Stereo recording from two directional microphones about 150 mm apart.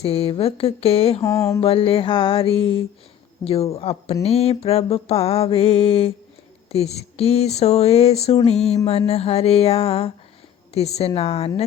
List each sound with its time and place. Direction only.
0.0 s speech: 40° left (ahead or behind)
1.2 s mantra: 20° left (ahead or behind)
1.6 s speech: 40° left (ahead or behind)